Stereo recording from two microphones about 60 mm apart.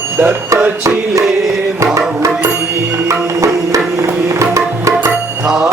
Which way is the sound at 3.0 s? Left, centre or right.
Right.